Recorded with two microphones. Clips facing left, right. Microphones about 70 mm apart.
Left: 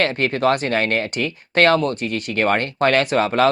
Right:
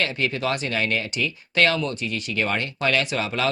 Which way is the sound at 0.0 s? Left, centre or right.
Left.